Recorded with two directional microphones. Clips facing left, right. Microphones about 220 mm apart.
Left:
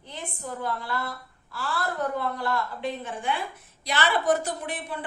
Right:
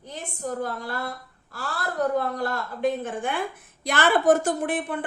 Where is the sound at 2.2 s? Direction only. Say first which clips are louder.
Right 1 dB; 40° right (ahead or behind).